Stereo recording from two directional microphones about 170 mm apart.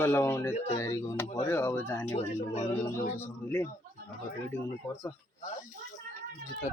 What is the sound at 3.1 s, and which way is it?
Speech, 15° left (ahead or behind).